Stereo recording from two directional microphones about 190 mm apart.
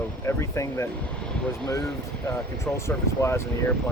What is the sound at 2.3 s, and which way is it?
Speech, 15° left (ahead or behind).